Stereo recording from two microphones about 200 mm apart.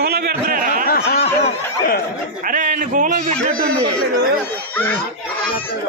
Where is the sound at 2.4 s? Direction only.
40° right (ahead or behind).